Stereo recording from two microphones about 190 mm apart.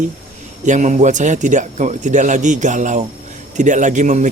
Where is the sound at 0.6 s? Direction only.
40° right (ahead or behind).